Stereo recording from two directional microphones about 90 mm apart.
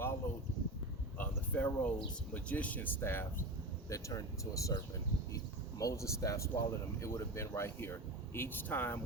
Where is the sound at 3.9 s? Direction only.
35° left (ahead or behind).